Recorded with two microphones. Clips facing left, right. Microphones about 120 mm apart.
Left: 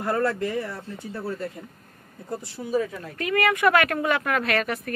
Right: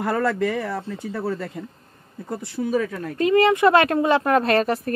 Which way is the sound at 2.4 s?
70° right (ahead or behind).